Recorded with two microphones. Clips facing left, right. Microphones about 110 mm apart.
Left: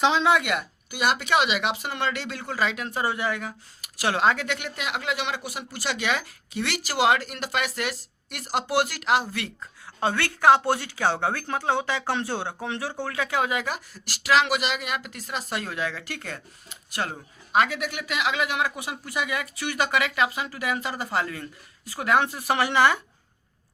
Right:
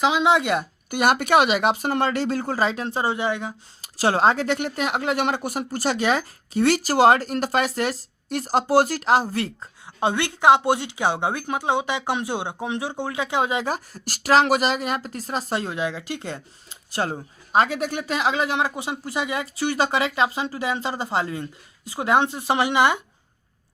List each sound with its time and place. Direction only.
0.0 s speech: 10° right (ahead or behind)
0.3 s speech: 30° right (ahead or behind)
0.9 s speech: 50° right (ahead or behind)
9.8 s speech: 20° right (ahead or behind)